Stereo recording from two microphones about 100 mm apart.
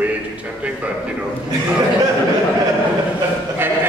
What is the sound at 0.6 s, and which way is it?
Speech, 10° right (ahead or behind).